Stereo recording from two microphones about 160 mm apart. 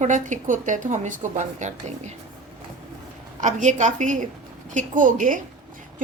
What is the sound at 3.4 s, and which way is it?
Speech, 50° right (ahead or behind).